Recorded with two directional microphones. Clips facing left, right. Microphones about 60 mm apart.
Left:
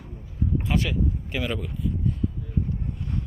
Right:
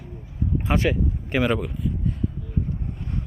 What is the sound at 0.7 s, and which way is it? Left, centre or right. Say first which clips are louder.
Speech: right 6 dB; right.